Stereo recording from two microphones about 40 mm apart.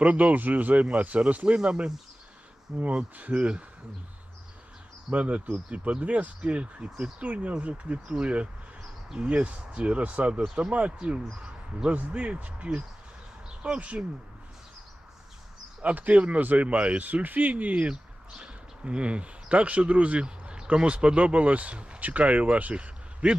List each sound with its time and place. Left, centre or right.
0.0 s speech: right
1.5 s speech: right
2.7 s speech: right
5.1 s speech: right
15.8 s speech: right
22.7 s a sound: right